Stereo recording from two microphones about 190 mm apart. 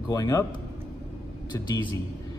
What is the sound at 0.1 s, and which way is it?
Speech, 20° left (ahead or behind).